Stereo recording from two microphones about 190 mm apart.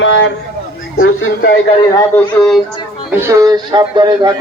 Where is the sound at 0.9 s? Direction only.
90° left.